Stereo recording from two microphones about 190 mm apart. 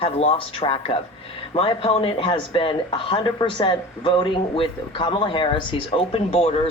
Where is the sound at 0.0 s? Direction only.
30° left (ahead or behind).